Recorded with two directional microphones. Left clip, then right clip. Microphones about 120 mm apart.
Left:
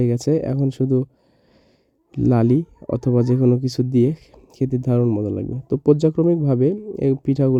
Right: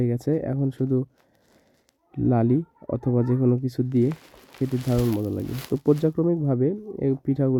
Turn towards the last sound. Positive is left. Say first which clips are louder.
# left 5 dB
turn(degrees=35)  # may be behind; listen again after turning